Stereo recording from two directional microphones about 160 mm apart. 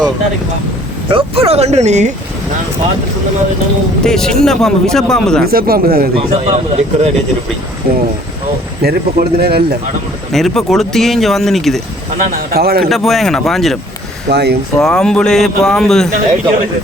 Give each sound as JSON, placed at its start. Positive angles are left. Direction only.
{"t": 1.0, "sound": "speech", "side_deg": -35}
{"t": 4.0, "sound": "speech", "side_deg": 5}
{"t": 5.5, "sound": "a man's voice", "side_deg": -70}
{"t": 6.1, "sound": "speech", "side_deg": -40}
{"t": 7.9, "sound": "a man's voice", "side_deg": -70}
{"t": 10.3, "sound": "speech", "side_deg": 0}
{"t": 12.1, "sound": "a man's voice", "side_deg": -65}
{"t": 12.9, "sound": "speech", "side_deg": 0}
{"t": 14.3, "sound": "speech", "side_deg": -90}
{"t": 14.8, "sound": "speech", "side_deg": 5}